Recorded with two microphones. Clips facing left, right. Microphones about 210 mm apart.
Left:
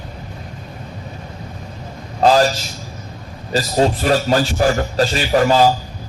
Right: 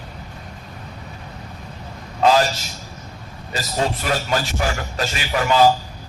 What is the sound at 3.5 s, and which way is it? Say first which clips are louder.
A man's voice: left 7 dB; 35° left (ahead or behind).